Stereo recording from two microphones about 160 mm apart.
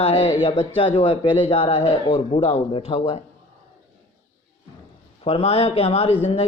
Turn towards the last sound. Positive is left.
turn(degrees=40)  # may be behind; listen again after turning